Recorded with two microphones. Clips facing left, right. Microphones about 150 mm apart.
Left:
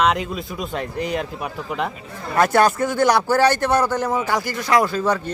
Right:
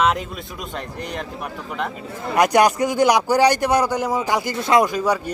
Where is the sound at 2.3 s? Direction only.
15° right (ahead or behind).